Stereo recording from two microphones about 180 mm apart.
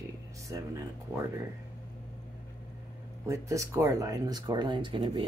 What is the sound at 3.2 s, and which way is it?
Speech, 15° right (ahead or behind).